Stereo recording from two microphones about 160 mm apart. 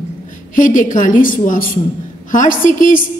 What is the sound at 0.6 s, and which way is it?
A woman's voice, 55° left (ahead or behind).